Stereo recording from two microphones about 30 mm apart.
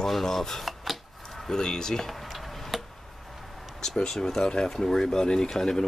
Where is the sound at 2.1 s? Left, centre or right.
Centre.